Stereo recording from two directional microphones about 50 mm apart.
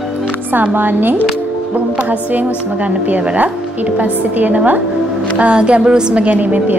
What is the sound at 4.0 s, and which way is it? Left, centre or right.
Speech, right.